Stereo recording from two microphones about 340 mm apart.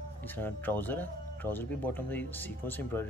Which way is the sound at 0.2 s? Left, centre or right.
Centre.